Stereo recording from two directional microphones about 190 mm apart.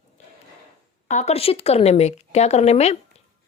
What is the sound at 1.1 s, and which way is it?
Speech, 35° left (ahead or behind).